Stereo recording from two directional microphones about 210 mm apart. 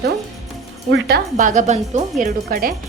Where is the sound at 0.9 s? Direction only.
55° right (ahead or behind); by 2.0 s 35° right (ahead or behind).